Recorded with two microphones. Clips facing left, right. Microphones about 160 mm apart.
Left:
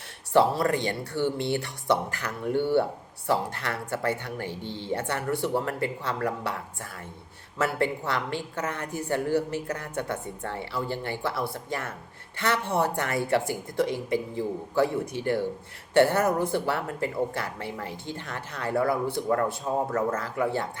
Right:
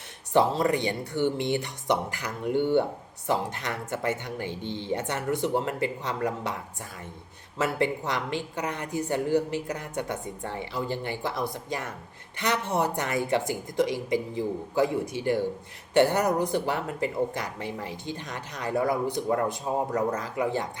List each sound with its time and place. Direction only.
0.3 s speech: 20° right (ahead or behind)
7.6 s speech: 20° right (ahead or behind)